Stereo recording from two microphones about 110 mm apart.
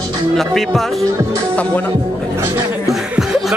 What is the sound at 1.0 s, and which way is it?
Music, 30° right (ahead or behind).